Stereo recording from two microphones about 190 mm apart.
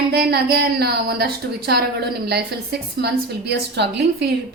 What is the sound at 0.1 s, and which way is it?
A woman's voice, 55° right (ahead or behind).